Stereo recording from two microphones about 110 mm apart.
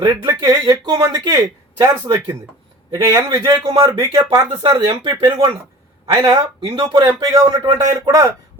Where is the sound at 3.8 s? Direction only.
30° right (ahead or behind).